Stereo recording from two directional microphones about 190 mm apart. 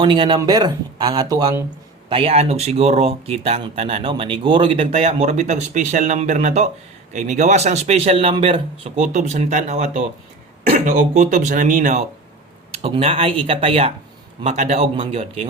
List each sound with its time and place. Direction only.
0.0 s speech: 25° right (ahead or behind)
2.0 s speech: 30° right (ahead or behind)
12.7 s speech: 30° right (ahead or behind)